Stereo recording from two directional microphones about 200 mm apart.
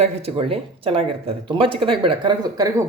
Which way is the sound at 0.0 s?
30° right (ahead or behind).